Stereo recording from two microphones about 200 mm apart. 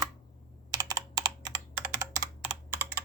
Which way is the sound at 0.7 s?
20° right (ahead or behind).